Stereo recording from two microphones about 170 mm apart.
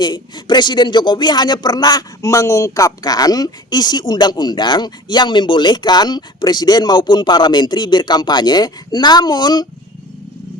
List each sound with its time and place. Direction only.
0.0 s speech: 25° left (ahead or behind)